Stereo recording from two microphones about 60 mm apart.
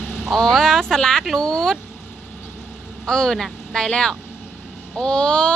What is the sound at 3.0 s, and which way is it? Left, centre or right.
Speech, centre.